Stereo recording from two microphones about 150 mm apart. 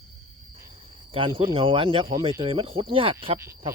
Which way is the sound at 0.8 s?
35° right (ahead or behind).